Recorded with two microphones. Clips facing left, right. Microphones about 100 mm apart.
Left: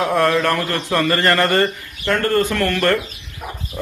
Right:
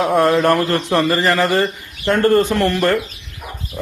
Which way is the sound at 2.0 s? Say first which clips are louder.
Right 4 dB; 25° right (ahead or behind).